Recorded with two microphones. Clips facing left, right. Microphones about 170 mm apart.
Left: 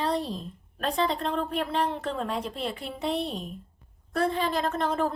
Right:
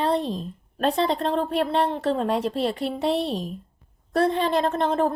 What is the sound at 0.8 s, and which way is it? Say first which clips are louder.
A woman's voice: right 5 dB; 30° right (ahead or behind).